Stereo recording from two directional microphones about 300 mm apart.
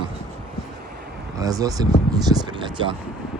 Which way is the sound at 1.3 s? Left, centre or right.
Centre.